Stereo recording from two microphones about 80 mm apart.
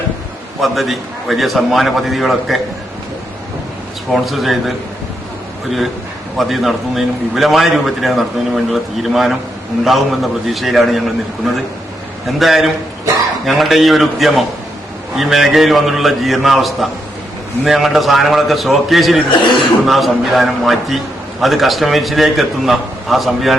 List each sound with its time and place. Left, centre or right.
0.6 s a man's voice: centre
4.1 s a man's voice: centre
6.3 s a man's voice: centre
12.4 s a man's voice: centre
19.3 s speech: left
19.8 s a man's voice: centre